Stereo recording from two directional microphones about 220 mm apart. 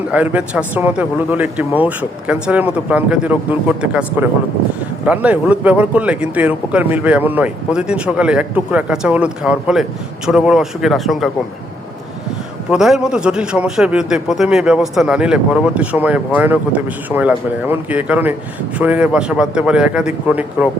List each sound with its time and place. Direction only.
0.1 s a man's voice: 5° right (ahead or behind)
12.7 s a man's voice: centre (ahead or behind)